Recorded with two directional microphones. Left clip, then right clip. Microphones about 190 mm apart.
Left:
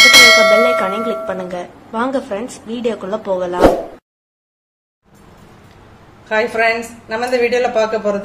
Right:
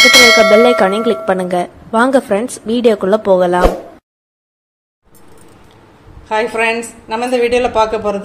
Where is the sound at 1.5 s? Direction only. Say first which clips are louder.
Right 9 dB; 35° right (ahead or behind).